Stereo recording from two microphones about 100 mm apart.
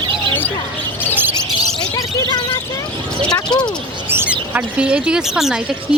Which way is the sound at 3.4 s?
45° left (ahead or behind).